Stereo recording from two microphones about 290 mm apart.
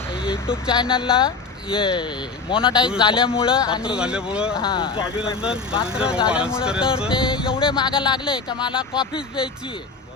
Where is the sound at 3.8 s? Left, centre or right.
Centre.